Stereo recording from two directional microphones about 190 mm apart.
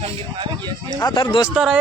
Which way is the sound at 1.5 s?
Centre (ahead or behind).